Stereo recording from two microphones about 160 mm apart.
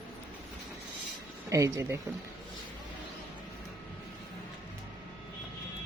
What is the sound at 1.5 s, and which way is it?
Speech, 20° right (ahead or behind).